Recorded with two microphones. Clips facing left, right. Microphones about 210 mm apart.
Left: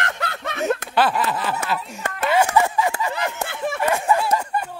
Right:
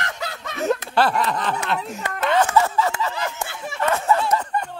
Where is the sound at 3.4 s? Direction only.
55° left (ahead or behind).